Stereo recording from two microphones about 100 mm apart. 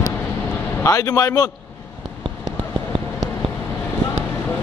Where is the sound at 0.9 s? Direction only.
35° left (ahead or behind).